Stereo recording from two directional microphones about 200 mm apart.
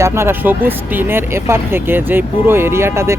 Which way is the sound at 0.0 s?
10° right (ahead or behind).